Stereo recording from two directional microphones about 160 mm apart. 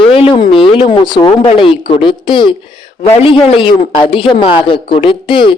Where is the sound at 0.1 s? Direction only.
35° left (ahead or behind).